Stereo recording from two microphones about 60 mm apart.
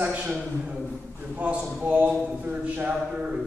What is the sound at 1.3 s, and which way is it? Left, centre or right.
A man's voice, right.